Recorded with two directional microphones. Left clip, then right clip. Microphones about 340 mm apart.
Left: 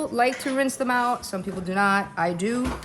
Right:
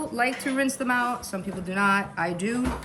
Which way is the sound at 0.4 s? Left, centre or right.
Left.